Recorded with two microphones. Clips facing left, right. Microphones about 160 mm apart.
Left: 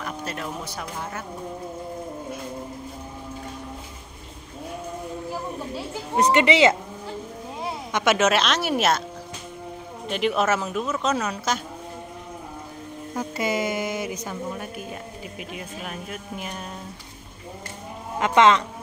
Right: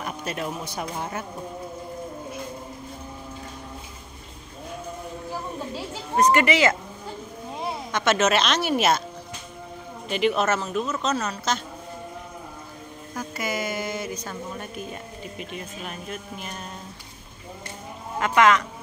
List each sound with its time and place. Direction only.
0.0 s speech: 15° right (ahead or behind)
6.3 s speech: 20° left (ahead or behind)
7.9 s speech: 10° left (ahead or behind)
10.0 s speech: centre (ahead or behind)
13.1 s speech: 25° left (ahead or behind)
15.3 s speech: 5° left (ahead or behind)
18.2 s speech: 25° left (ahead or behind)